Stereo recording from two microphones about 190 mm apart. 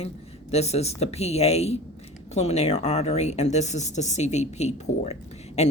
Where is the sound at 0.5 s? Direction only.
35° left (ahead or behind).